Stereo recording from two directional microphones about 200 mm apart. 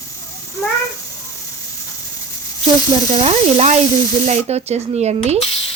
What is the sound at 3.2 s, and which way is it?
Speech, 30° right (ahead or behind).